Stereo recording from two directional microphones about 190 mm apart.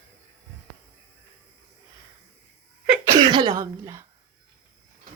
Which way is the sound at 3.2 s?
25° right (ahead or behind).